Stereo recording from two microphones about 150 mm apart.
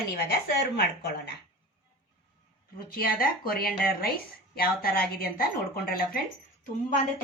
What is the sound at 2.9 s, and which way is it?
A woman's voice, 80° left.